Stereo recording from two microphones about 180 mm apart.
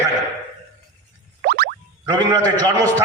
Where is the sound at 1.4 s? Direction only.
60° right (ahead or behind).